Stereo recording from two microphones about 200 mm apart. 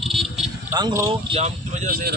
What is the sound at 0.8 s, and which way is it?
Speech, 20° right (ahead or behind).